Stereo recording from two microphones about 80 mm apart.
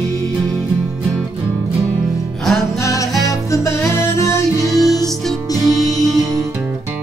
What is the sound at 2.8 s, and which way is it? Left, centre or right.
Music, left.